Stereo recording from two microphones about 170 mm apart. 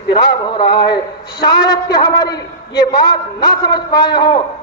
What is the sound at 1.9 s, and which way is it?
A man's voice, 25° left (ahead or behind).